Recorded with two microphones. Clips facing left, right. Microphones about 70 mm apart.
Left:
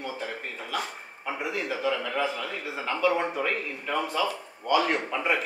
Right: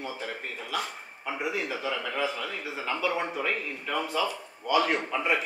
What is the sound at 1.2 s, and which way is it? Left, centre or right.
A man's voice, centre.